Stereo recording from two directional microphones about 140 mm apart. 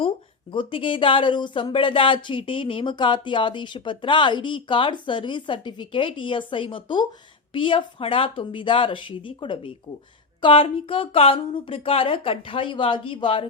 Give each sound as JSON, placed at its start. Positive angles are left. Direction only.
{"t": 0.5, "sound": "speech", "side_deg": 35}